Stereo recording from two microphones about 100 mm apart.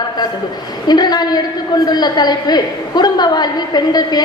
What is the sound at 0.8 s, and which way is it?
A woman's voice, 45° left (ahead or behind).